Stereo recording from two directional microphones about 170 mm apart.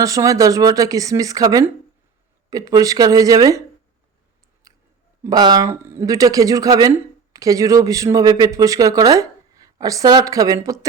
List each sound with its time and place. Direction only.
0.0 s speech: 20° right (ahead or behind)
4.7 s chewing: 20° right (ahead or behind)
5.2 s speech: 25° right (ahead or behind)